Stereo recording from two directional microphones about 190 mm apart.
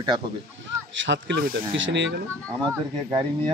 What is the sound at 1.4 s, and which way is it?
Speech, 50° right (ahead or behind).